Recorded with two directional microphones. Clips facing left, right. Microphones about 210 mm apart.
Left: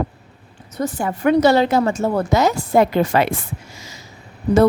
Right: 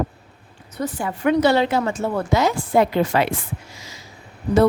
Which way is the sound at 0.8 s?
45° left (ahead or behind).